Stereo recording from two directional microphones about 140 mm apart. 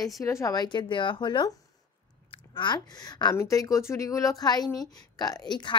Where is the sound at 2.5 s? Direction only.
30° left (ahead or behind).